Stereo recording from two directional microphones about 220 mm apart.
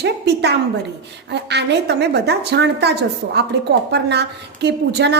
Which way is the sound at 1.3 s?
50° right (ahead or behind).